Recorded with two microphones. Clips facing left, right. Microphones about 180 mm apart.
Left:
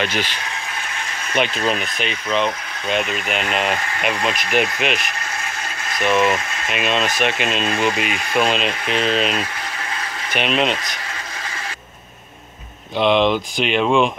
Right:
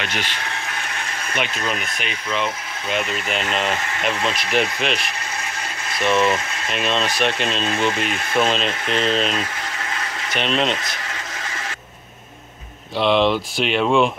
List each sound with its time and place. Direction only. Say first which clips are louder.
1.3 s speech: left 5 dB; 30° left (ahead or behind)
3.0 s speech: even; 15° left (ahead or behind)
12.9 s speech: left 1 dB; centre (ahead or behind)